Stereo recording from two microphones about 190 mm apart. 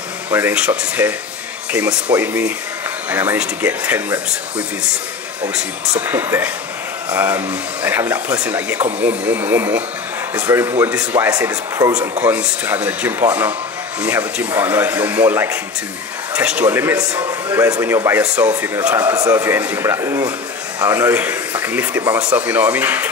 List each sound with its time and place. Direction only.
0.3 s a man's voice: 10° right (ahead or behind)
11.3 s speech: 20° right (ahead or behind)
11.9 s a man's voice: 10° right (ahead or behind)